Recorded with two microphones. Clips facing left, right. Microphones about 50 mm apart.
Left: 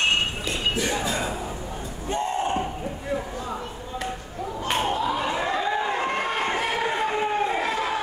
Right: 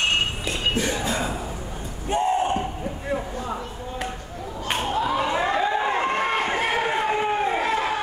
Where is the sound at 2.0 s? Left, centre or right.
Centre.